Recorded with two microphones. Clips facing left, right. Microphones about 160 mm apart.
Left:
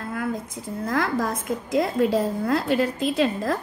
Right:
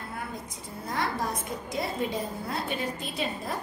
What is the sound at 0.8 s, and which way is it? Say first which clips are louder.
A woman's voice: left 6 dB; 90° left.